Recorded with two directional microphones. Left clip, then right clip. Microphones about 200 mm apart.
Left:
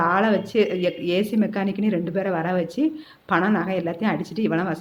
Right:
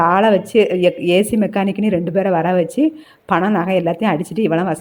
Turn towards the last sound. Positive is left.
turn(degrees=-30)  # may be behind; listen again after turning